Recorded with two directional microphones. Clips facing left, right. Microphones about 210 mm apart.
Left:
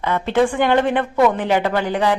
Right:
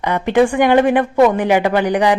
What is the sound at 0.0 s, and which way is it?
A woman's voice, 15° right (ahead or behind).